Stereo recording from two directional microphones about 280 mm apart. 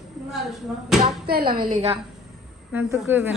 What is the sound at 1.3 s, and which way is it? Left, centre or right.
Speech, right.